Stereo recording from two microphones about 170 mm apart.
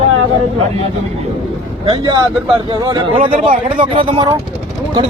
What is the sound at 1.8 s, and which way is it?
Speech, 25° right (ahead or behind).